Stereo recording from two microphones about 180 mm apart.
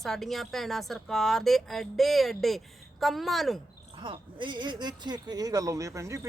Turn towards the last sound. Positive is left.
turn(degrees=-15)  # may be behind; listen again after turning